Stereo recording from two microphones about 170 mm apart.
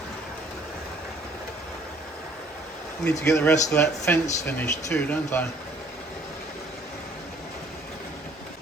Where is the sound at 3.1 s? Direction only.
15° left (ahead or behind).